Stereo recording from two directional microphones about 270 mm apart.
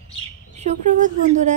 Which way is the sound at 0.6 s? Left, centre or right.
Right.